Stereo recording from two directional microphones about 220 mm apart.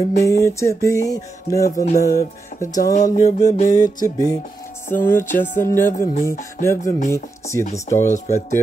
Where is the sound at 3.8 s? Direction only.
15° left (ahead or behind).